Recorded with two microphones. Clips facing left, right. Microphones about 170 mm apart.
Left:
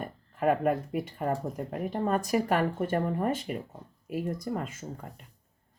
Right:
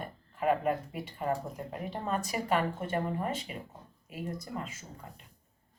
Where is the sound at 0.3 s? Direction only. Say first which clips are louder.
Left 3 dB; 50° left (ahead or behind).